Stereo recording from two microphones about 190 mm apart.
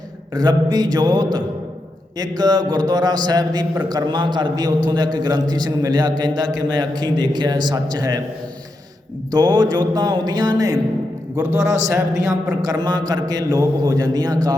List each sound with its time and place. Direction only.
0.3 s a man's voice: 20° right (ahead or behind)
9.3 s a man's voice: 20° right (ahead or behind)